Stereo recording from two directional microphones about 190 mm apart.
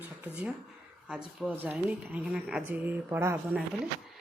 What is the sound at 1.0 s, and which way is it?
A woman's voice, 5° right (ahead or behind).